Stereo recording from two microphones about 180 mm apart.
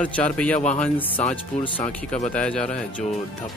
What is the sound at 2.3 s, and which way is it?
Speech, 5° left (ahead or behind).